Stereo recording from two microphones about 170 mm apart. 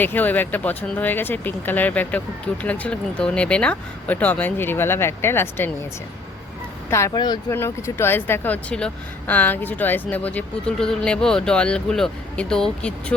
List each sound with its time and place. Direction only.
0.0 s speech: 10° left (ahead or behind)
6.9 s speech: 20° left (ahead or behind); by 13.1 s 5° left (ahead or behind)